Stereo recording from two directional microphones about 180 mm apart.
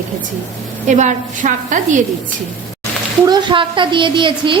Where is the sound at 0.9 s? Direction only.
40° right (ahead or behind).